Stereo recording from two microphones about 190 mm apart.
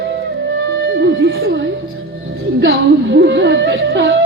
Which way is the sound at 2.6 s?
65° right (ahead or behind).